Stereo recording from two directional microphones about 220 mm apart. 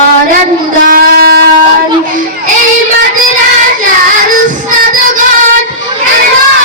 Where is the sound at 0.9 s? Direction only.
40° right (ahead or behind).